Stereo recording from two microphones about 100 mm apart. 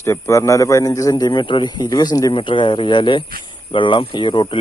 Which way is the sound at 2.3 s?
55° left (ahead or behind).